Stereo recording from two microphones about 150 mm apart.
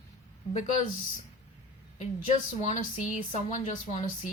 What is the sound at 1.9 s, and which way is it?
Speech, 50° left (ahead or behind).